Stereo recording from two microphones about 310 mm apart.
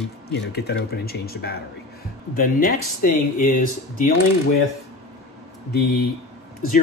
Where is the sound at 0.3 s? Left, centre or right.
Left.